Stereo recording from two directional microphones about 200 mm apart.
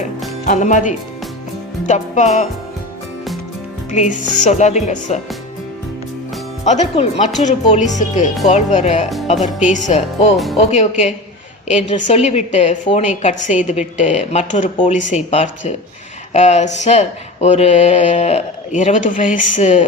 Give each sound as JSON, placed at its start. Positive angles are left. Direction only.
{"t": 0.4, "sound": "speech", "side_deg": 40}
{"t": 3.9, "sound": "speech", "side_deg": 35}
{"t": 6.7, "sound": "speech", "side_deg": 35}
{"t": 10.3, "sound": "speech", "side_deg": 0}
{"t": 10.6, "sound": "speech", "side_deg": 35}